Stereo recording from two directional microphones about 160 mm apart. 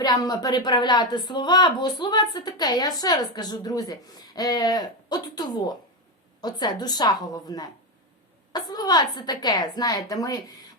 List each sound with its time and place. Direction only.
0.0 s a woman's voice: 25° left (ahead or behind)